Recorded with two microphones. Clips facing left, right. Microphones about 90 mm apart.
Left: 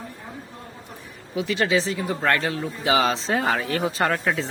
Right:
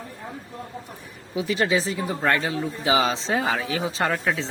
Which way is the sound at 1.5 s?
25° right (ahead or behind).